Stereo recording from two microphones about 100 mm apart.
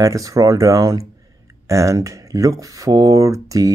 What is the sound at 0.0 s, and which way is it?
Speech, 35° right (ahead or behind).